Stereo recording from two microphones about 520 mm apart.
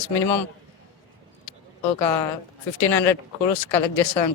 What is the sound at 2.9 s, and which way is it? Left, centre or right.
A man's voice, left.